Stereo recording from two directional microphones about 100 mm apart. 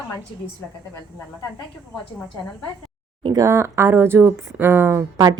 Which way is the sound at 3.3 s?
30° right (ahead or behind).